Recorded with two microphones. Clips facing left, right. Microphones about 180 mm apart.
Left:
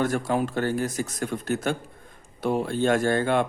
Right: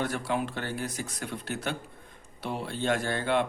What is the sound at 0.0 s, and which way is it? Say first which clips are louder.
Speech: left 6 dB; 45° left (ahead or behind).